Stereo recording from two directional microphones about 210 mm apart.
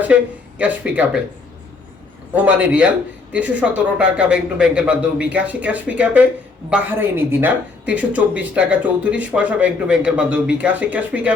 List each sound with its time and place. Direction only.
0.1 s speech: 5° right (ahead or behind)
2.3 s speech: 5° right (ahead or behind)